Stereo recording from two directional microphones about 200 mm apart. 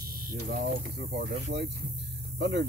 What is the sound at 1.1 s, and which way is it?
Speech, 60° right (ahead or behind).